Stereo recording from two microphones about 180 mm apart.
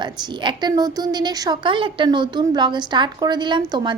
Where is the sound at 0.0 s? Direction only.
25° right (ahead or behind).